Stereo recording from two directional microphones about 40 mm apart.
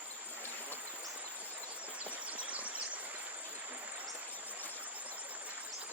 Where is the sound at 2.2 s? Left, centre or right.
Right.